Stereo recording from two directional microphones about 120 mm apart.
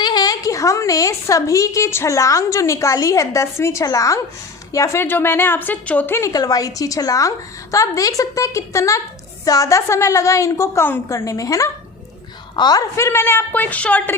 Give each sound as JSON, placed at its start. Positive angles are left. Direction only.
{"t": 0.0, "sound": "a woman's voice", "side_deg": 35}
{"t": 13.0, "sound": "a woman's voice", "side_deg": 20}